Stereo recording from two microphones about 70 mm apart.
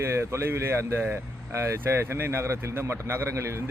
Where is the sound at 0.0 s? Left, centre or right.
Right.